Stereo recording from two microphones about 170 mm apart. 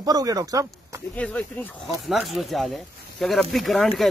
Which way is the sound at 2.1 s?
Centre (ahead or behind).